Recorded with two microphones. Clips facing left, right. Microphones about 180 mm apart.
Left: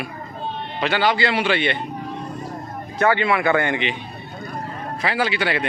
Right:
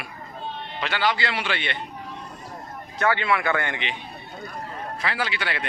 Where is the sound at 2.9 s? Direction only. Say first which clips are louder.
Left 4 dB; 5° left (ahead or behind).